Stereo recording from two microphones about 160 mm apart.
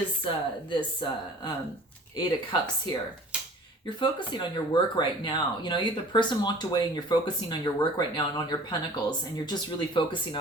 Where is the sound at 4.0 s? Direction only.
30° left (ahead or behind).